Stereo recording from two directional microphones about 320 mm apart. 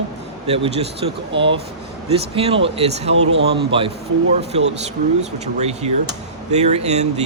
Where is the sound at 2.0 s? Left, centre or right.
Centre.